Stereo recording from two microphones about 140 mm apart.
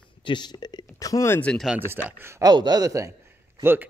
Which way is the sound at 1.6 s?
15° right (ahead or behind).